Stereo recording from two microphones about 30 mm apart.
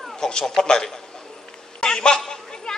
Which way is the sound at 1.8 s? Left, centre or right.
Left.